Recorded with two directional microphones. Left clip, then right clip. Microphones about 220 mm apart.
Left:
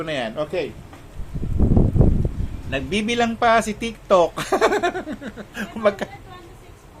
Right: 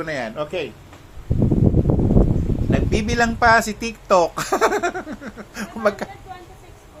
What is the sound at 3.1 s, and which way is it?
Speech, 10° right (ahead or behind).